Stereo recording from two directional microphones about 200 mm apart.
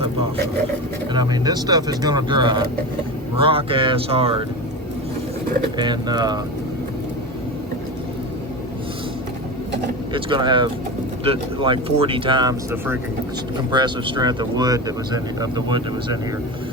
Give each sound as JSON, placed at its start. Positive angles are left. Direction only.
{"t": 1.1, "sound": "speech", "side_deg": -20}
{"t": 5.7, "sound": "speech", "side_deg": -20}
{"t": 10.1, "sound": "speech", "side_deg": -25}